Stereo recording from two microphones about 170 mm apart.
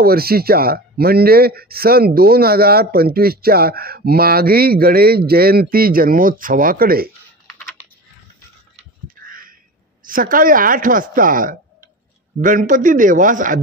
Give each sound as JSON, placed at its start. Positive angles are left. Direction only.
{"t": 0.0, "sound": "speech", "side_deg": -65}
{"t": 9.0, "sound": "a sound", "side_deg": -55}
{"t": 10.0, "sound": "speech", "side_deg": -55}